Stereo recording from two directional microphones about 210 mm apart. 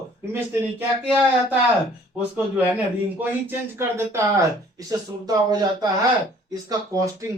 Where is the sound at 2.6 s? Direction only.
10° right (ahead or behind).